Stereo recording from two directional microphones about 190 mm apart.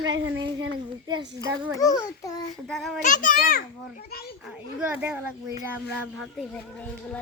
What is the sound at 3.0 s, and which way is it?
Speech, 45° left (ahead or behind).